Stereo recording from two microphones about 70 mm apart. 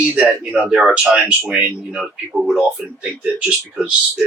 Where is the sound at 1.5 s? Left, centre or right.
Centre.